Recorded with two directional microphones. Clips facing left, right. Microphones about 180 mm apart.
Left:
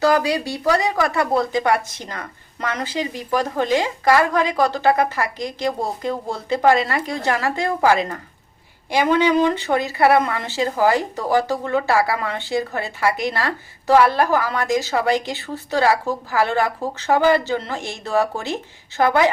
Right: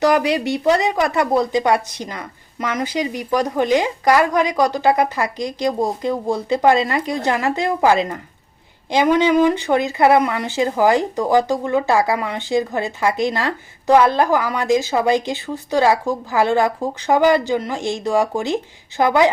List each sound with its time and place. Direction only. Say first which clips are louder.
0.0 s speech: right 2 dB; 20° right (ahead or behind)